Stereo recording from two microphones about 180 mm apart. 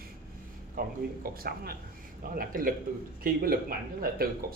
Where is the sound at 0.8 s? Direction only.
55° right (ahead or behind).